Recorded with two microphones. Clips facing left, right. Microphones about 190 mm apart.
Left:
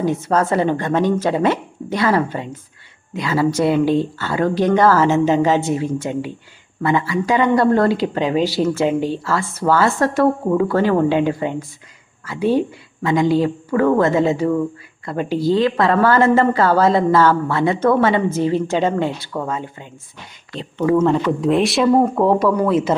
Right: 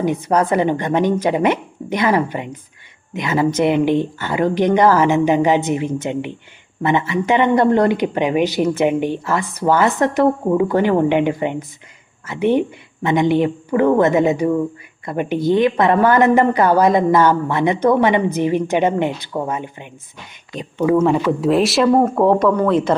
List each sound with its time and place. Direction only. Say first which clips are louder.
0.0 s speech: right 1 dB; 15° right (ahead or behind); by 23.0 s 5° left (ahead or behind)